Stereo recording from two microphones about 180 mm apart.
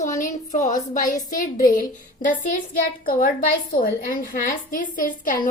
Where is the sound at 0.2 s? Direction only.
45° left (ahead or behind).